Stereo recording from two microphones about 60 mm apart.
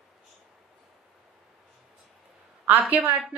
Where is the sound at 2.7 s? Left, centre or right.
Right.